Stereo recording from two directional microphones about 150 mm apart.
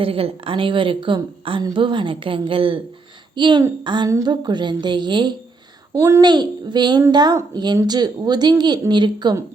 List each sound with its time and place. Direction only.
0.0 s a woman's voice: 40° right (ahead or behind)
5.9 s a woman's voice: 20° right (ahead or behind)